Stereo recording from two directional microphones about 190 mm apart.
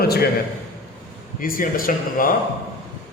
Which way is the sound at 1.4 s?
50° left (ahead or behind).